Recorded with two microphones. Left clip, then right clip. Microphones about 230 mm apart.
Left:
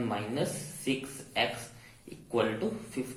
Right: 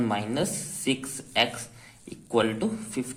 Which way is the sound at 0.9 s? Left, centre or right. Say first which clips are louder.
Right 4 dB; right.